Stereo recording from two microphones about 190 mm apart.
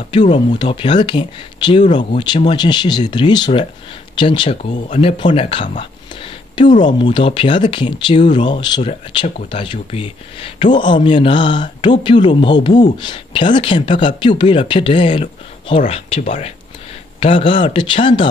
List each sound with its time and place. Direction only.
0.6 s speech: 25° left (ahead or behind)
6.8 s speech: 25° left (ahead or behind)